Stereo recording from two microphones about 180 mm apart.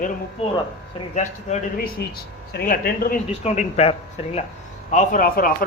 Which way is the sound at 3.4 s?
35° left (ahead or behind).